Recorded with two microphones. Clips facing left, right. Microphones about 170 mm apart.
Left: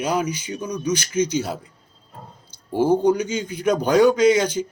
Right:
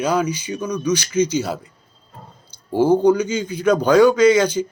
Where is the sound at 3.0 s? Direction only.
20° left (ahead or behind).